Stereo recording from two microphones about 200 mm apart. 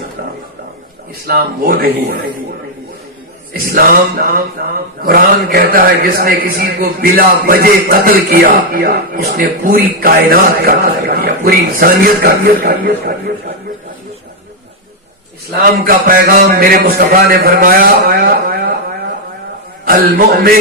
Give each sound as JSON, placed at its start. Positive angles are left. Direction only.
{"t": 1.3, "sound": "a man's voice", "side_deg": -50}
{"t": 3.7, "sound": "a man's voice", "side_deg": -45}
{"t": 15.8, "sound": "a man's voice", "side_deg": -45}
{"t": 19.8, "sound": "a man's voice", "side_deg": -50}